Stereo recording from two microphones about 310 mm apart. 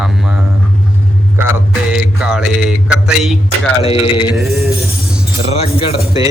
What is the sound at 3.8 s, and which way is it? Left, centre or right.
Speech, centre.